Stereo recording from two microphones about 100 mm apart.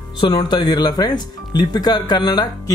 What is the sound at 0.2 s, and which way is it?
Speech, 50° left (ahead or behind).